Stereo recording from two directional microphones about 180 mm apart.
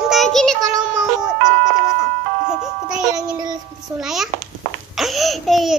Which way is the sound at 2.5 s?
5° right (ahead or behind).